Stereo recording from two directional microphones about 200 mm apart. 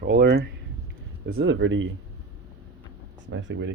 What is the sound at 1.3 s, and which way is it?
Speech, 75° right (ahead or behind).